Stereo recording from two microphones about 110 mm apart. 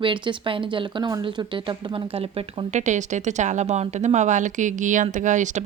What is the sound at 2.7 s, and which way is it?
A woman's voice, 90° right.